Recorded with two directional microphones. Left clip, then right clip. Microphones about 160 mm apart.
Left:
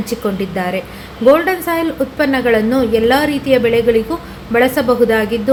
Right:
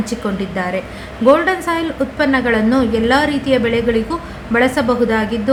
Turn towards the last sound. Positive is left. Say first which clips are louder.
# left 3 dB
turn(degrees=20)  # may be behind; listen again after turning